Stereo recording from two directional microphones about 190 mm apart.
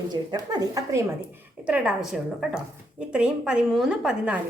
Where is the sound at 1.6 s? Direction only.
5° right (ahead or behind).